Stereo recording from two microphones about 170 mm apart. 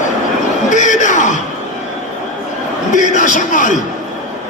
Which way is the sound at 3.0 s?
50° left (ahead or behind).